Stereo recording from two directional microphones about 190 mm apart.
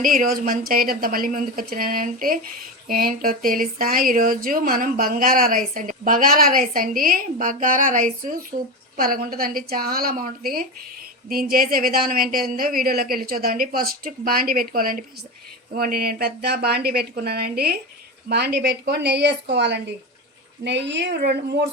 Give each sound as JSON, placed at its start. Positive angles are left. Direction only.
{"t": 0.0, "sound": "a woman's voice", "side_deg": -45}